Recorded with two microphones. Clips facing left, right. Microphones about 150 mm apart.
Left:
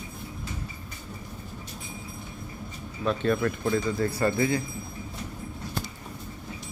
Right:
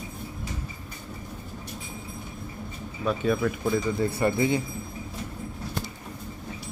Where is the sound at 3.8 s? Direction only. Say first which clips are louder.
Right 1 dB; 20° right (ahead or behind).